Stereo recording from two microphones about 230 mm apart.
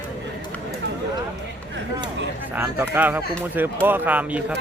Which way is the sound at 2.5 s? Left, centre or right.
Centre.